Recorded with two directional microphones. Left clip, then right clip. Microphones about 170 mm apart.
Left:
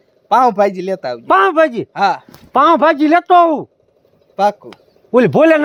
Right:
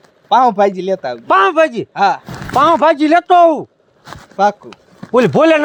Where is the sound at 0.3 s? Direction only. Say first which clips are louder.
Right 1 dB; 20° left (ahead or behind).